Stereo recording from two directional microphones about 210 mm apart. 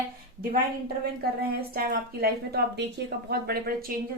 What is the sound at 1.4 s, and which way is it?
A woman's voice, 45° right (ahead or behind).